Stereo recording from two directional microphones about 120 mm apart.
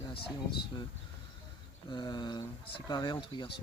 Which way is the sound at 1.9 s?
35° left (ahead or behind).